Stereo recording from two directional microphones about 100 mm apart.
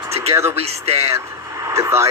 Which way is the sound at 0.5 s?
90° right.